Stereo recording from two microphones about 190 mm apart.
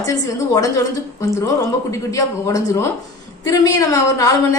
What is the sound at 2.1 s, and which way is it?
A woman's voice, 15° left (ahead or behind).